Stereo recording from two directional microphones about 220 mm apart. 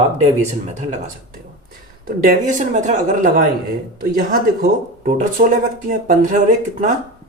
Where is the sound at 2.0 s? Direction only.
40° right (ahead or behind).